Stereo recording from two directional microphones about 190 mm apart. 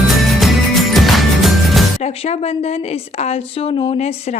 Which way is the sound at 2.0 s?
35° left (ahead or behind).